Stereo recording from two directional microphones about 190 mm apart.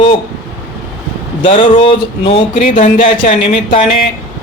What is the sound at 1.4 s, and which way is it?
Speech, 30° left (ahead or behind).